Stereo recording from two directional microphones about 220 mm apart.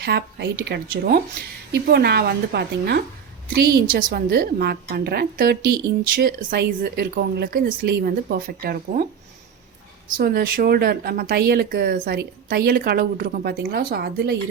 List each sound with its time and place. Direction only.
0.0 s a woman's voice: 45° right (ahead or behind)
10.1 s a woman's voice: 40° right (ahead or behind)